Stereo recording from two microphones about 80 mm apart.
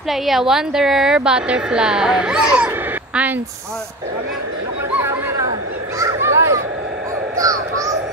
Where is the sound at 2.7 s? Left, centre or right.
Right.